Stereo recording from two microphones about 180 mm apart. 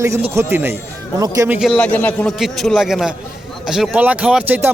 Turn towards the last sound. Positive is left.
turn(degrees=-10)  # may be behind; listen again after turning